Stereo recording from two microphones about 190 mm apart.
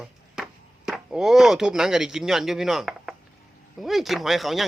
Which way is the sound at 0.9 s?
Centre (ahead or behind).